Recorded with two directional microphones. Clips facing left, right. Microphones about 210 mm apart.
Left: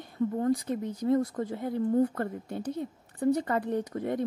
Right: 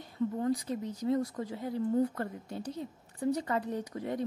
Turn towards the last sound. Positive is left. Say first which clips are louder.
# left 5 dB
turn(degrees=55)  # may be behind; listen again after turning